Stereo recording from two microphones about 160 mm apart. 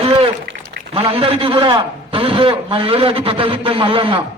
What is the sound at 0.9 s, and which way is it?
A man's voice, 35° right (ahead or behind).